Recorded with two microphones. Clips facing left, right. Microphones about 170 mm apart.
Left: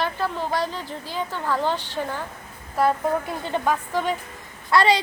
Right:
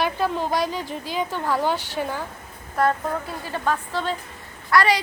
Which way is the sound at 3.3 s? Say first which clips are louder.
Left 2 dB; 20° left (ahead or behind).